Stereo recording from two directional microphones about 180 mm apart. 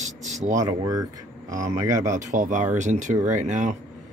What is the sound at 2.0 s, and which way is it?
Speech, 45° right (ahead or behind).